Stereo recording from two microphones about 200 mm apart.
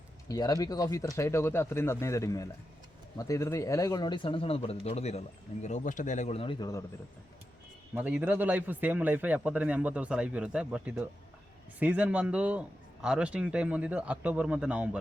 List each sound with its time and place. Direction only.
0.3 s speech: 20° left (ahead or behind)
7.9 s a man's voice: 10° right (ahead or behind)